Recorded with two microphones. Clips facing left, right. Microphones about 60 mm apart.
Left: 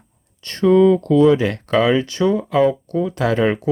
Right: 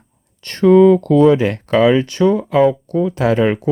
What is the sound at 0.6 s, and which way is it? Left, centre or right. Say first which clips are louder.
Speech: right 4 dB; right.